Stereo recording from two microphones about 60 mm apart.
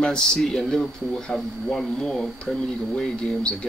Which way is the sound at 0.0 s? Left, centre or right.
Centre.